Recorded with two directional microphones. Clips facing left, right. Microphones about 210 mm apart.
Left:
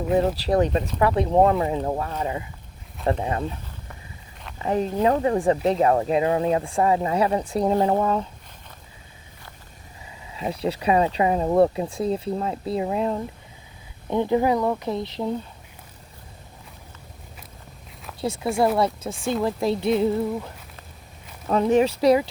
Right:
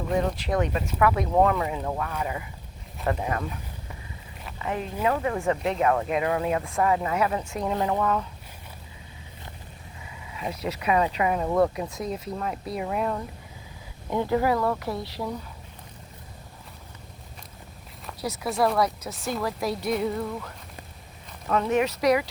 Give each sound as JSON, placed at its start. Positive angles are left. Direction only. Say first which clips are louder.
{"t": 0.2, "sound": "speech", "louder": "left 5 dB", "side_deg": 35}
{"t": 4.6, "sound": "speech", "louder": "left 6 dB", "side_deg": 35}
{"t": 10.3, "sound": "speech", "louder": "left 5 dB", "side_deg": 30}
{"t": 18.2, "sound": "speech", "louder": "left 3 dB", "side_deg": 25}